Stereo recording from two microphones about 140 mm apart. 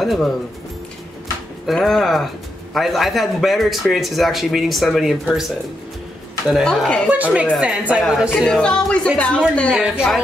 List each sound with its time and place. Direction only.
0.0 s speech: centre (ahead or behind)
1.7 s a man's voice: centre (ahead or behind)
6.5 s a man's voice: centre (ahead or behind)
7.1 s a woman's voice: 10° right (ahead or behind); by 9.4 s 5° left (ahead or behind)
9.8 s a man's voice: 5° right (ahead or behind)